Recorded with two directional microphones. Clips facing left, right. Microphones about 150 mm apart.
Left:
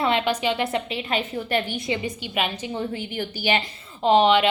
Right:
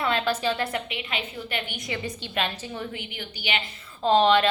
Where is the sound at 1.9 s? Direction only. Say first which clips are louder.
Left 5 dB; 15° left (ahead or behind).